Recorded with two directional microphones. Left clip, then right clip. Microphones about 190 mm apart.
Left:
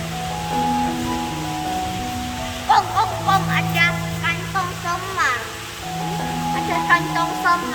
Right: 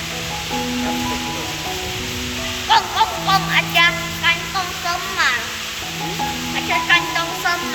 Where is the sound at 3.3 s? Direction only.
20° left (ahead or behind).